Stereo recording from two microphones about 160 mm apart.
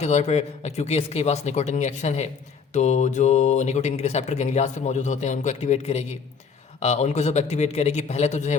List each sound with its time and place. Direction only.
0.0 s speech: 45° left (ahead or behind)